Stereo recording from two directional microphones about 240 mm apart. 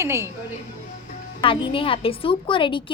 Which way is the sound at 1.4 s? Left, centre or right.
Left.